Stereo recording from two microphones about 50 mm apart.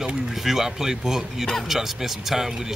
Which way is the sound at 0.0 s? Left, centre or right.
Centre.